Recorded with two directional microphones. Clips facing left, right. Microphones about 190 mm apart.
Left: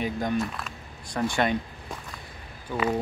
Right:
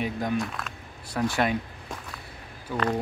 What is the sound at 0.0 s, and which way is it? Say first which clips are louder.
Speech: left 1 dB; centre (ahead or behind).